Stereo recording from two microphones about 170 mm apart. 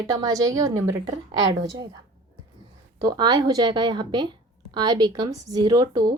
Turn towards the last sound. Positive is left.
turn(degrees=-25)  # may be behind; listen again after turning